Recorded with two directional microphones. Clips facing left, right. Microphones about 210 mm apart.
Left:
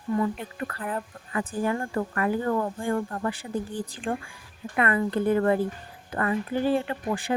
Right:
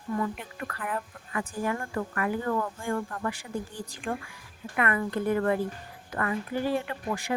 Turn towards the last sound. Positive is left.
turn(degrees=30)  # may be behind; listen again after turning